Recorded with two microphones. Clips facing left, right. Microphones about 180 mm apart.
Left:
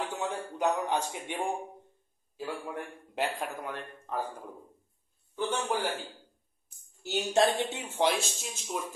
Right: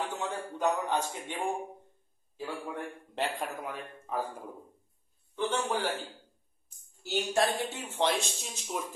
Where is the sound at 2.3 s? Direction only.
10° left (ahead or behind).